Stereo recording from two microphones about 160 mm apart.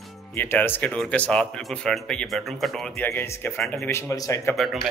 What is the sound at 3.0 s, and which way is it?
Speech, 15° left (ahead or behind).